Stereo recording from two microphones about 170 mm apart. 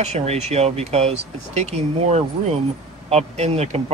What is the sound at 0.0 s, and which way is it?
Speech, 40° right (ahead or behind).